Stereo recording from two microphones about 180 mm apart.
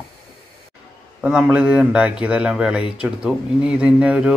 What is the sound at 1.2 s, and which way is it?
Speech, 5° right (ahead or behind).